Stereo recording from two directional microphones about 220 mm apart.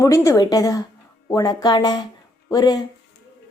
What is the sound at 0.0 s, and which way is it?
A woman's voice, 15° left (ahead or behind).